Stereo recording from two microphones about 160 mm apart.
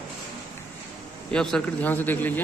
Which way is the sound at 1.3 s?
5° left (ahead or behind).